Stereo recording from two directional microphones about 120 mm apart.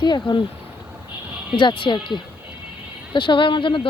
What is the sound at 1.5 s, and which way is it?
Speech, 40° left (ahead or behind).